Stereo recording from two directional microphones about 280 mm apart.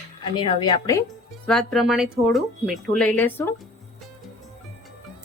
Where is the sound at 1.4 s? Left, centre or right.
Centre.